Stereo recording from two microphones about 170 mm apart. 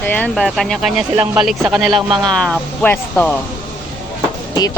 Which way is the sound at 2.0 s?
25° right (ahead or behind).